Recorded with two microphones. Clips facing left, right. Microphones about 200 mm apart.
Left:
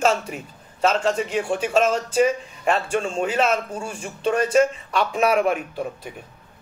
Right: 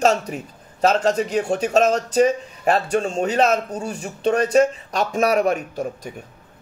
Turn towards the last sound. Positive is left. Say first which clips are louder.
# right 2 dB
turn(degrees=-40)  # may be behind; listen again after turning